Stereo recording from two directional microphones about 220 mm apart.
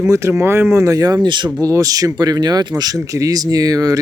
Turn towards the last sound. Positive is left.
turn(degrees=-15)  # may be behind; listen again after turning